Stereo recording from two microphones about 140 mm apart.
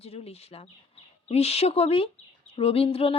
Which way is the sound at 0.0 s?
45° left (ahead or behind).